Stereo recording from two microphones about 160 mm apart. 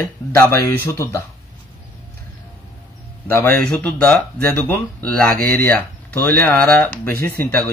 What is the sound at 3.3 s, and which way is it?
Speech, 10° left (ahead or behind).